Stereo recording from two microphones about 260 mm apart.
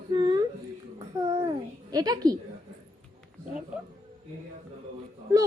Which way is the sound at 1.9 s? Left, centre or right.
Centre.